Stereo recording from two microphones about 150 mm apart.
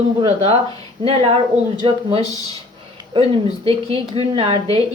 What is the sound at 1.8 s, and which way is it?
A woman's voice, 35° right (ahead or behind).